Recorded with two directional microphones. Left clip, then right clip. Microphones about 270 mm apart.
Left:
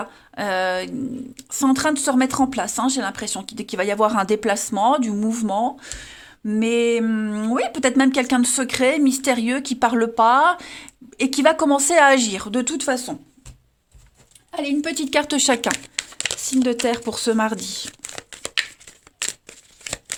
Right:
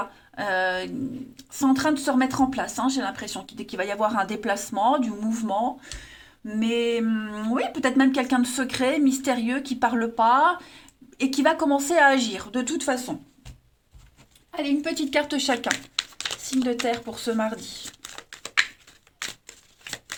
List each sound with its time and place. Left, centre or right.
0.3 s speech: left
14.5 s speech: left